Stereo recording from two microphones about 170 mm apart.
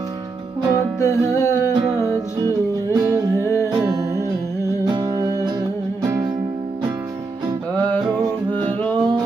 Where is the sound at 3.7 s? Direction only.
20° right (ahead or behind).